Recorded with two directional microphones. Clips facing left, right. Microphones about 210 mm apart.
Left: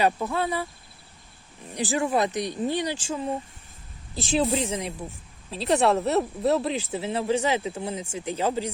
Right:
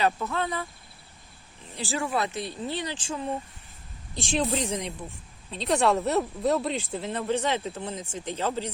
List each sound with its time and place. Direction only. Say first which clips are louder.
0.0 s speech: left 3 dB; 15° left (ahead or behind)
1.7 s speech: left 5 dB; 15° left (ahead or behind)